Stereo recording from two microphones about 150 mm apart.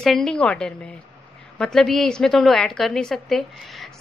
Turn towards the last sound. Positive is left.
turn(degrees=0)  # may be behind; listen again after turning